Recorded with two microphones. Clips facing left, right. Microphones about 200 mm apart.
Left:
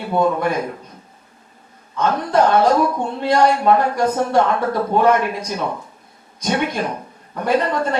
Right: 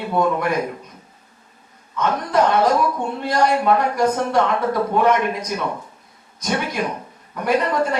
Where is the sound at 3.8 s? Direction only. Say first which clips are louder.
Left 1 dB; 30° left (ahead or behind).